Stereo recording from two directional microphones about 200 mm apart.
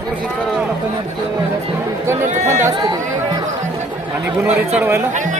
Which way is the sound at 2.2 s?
35° right (ahead or behind).